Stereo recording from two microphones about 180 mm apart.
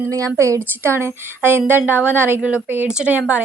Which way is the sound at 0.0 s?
20° right (ahead or behind).